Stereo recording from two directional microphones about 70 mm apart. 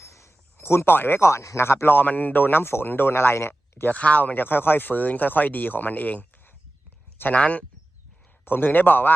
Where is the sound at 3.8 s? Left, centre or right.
Left.